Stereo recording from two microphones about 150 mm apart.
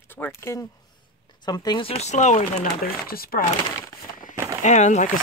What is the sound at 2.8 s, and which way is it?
Speech, 85° left.